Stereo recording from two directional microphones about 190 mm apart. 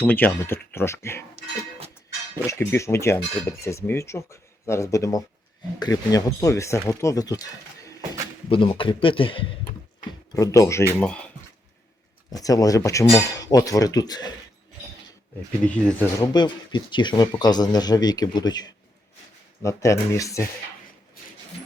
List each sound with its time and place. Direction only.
0.0 s speech: 10° left (ahead or behind)
2.3 s speech: 15° left (ahead or behind)
8.4 s speech: 30° left (ahead or behind)
10.1 s speech: 20° left (ahead or behind)
12.3 s speech: 20° left (ahead or behind)
15.6 s speech: 5° left (ahead or behind)
16.2 s speech: 20° left (ahead or behind)